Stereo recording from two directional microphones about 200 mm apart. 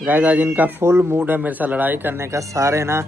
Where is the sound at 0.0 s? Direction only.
5° right (ahead or behind).